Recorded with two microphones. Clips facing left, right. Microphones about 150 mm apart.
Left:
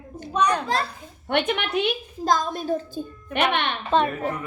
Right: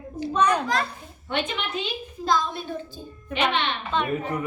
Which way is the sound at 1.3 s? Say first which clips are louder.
Left 5 dB; 65° left (ahead or behind).